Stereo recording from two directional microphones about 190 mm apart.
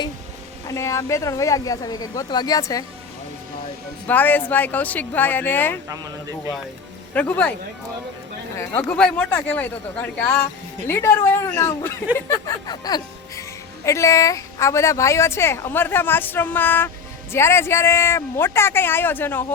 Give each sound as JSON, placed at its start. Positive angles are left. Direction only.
{"t": 0.7, "sound": "a woman's voice", "side_deg": 15}
{"t": 4.0, "sound": "a woman's voice", "side_deg": 10}
{"t": 7.1, "sound": "a woman's voice", "side_deg": 10}
{"t": 8.5, "sound": "a woman's voice", "side_deg": 10}